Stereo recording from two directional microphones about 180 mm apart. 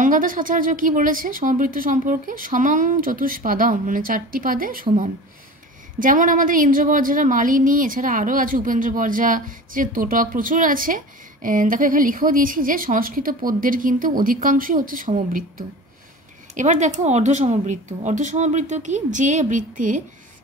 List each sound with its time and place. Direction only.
0.0 s a woman's voice: 50° right (ahead or behind)
5.9 s a woman's voice: 45° right (ahead or behind)